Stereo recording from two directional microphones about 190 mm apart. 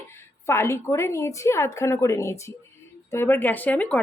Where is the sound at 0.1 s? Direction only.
15° left (ahead or behind).